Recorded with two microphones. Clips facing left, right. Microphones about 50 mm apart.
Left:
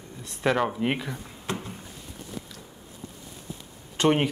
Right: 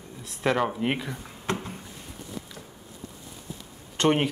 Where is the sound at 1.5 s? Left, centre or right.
Right.